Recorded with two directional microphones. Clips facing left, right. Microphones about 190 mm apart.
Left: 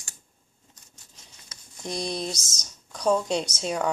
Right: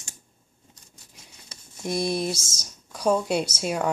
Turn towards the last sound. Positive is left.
turn(degrees=-5)  # may be behind; listen again after turning